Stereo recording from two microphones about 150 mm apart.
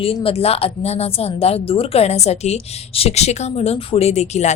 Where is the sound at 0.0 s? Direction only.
40° left (ahead or behind).